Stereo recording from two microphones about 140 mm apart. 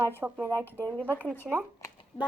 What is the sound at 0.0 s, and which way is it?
Speech, 15° right (ahead or behind).